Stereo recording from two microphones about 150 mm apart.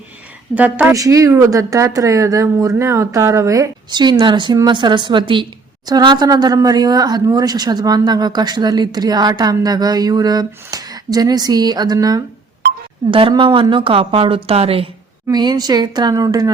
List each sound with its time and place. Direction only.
0.5 s a woman's voice: 10° right (ahead or behind)
0.9 s a woman's voice: 20° right (ahead or behind); by 14.8 s 40° right (ahead or behind)
15.3 s speech: 25° right (ahead or behind)